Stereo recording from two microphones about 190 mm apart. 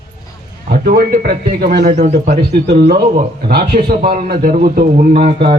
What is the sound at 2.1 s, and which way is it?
Speech, 40° right (ahead or behind).